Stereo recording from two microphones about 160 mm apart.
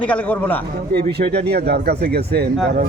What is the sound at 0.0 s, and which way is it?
Speech, 10° left (ahead or behind).